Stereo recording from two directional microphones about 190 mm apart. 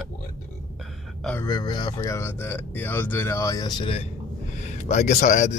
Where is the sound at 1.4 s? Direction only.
25° left (ahead or behind).